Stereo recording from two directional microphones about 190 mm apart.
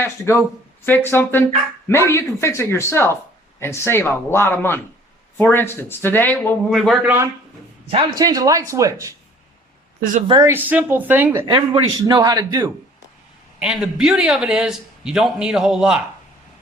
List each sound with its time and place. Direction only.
0.0 s speech: 15° left (ahead or behind); by 7.3 s 10° right (ahead or behind)
7.9 s speech: 25° right (ahead or behind)
10.0 s speech: 45° right (ahead or behind)
10.4 s speech: 10° right (ahead or behind)
11.4 s a man's voice: 25° right (ahead or behind)
13.6 s a man's voice: 5° right (ahead or behind)